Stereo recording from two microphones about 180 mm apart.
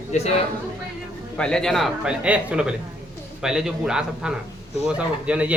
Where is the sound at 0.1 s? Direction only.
40° left (ahead or behind).